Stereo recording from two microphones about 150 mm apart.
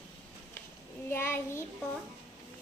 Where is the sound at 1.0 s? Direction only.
15° left (ahead or behind).